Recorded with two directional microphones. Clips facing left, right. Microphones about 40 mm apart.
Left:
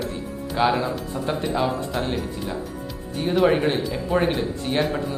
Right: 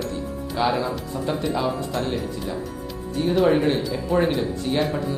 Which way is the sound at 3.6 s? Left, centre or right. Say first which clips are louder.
Right 1 dB; centre.